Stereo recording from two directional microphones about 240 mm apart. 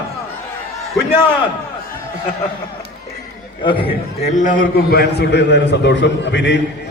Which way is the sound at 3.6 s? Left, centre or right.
Left.